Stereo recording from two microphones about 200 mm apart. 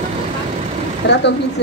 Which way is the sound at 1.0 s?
55° left (ahead or behind).